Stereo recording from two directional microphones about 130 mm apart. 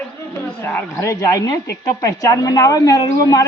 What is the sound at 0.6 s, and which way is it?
Speech, 15° left (ahead or behind).